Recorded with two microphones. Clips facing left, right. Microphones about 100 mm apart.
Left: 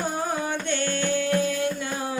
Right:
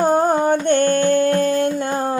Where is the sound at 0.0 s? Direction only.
50° right (ahead or behind).